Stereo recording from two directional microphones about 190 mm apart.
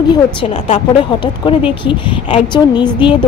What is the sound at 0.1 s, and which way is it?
A woman's voice, 25° left (ahead or behind).